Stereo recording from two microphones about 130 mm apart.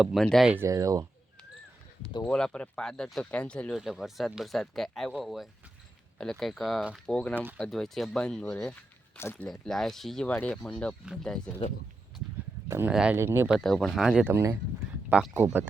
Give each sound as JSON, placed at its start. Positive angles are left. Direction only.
{"t": 0.0, "sound": "speech", "side_deg": 0}
{"t": 0.6, "sound": "speech", "side_deg": -25}
{"t": 2.2, "sound": "speech", "side_deg": 5}
{"t": 3.8, "sound": "speech", "side_deg": -5}
{"t": 7.2, "sound": "speech", "side_deg": 10}
{"t": 9.5, "sound": "speech", "side_deg": 5}
{"t": 12.6, "sound": "speech", "side_deg": -20}
{"t": 12.9, "sound": "speech", "side_deg": -5}
{"t": 13.1, "sound": "speech", "side_deg": -20}
{"t": 13.6, "sound": "speech", "side_deg": 5}
{"t": 14.3, "sound": "speech", "side_deg": -20}